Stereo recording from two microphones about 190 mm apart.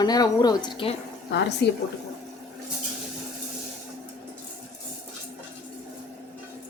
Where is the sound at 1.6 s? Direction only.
60° left (ahead or behind).